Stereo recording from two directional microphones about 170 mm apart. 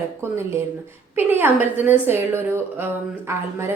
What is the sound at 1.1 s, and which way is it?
A woman's voice, 10° right (ahead or behind).